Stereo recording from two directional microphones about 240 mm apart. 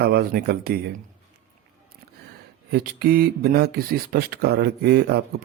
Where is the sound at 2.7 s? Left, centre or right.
Right.